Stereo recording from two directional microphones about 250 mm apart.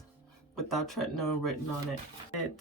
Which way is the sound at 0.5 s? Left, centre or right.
Centre.